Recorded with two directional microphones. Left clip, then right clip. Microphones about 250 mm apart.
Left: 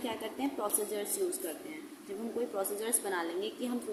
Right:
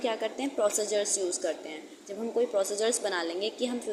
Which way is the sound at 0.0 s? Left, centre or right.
Centre.